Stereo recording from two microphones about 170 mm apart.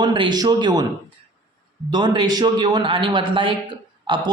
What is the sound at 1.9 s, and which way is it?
A man's voice, 25° right (ahead or behind).